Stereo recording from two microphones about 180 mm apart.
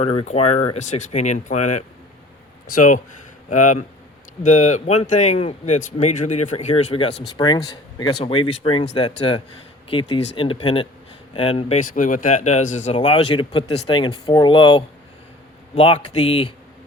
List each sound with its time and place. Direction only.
0.0 s speech: 30° left (ahead or behind)
11.9 s speech: 45° left (ahead or behind)
13.0 s speech: 30° left (ahead or behind)